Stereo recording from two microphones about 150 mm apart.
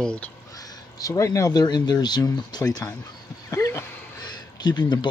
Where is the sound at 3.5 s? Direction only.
20° left (ahead or behind).